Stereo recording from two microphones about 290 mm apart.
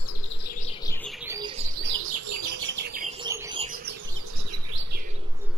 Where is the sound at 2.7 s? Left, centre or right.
Right.